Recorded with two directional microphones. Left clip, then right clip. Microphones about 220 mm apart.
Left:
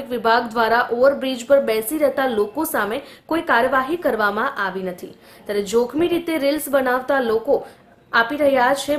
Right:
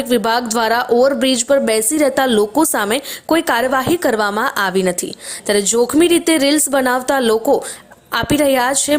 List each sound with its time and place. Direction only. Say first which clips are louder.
0.1 s speech: right 2 dB; 35° right (ahead or behind)